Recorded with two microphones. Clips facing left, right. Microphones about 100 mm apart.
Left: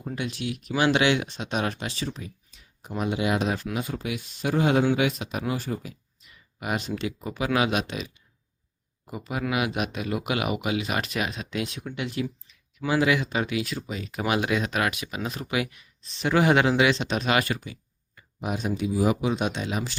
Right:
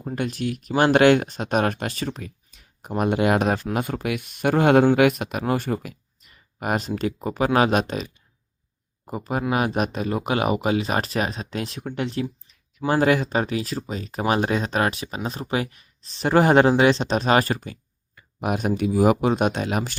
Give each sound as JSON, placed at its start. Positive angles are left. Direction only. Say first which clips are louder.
{"t": 0.0, "sound": "speech", "louder": "right 5 dB", "side_deg": -40}
{"t": 6.3, "sound": "speech", "louder": "right 5 dB", "side_deg": -45}
{"t": 12.8, "sound": "speech", "louder": "right 4 dB", "side_deg": -45}
{"t": 18.1, "sound": "speech", "louder": "right 5 dB", "side_deg": -60}